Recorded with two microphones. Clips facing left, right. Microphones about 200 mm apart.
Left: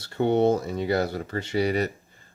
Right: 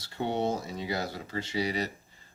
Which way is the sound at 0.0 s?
60° left (ahead or behind).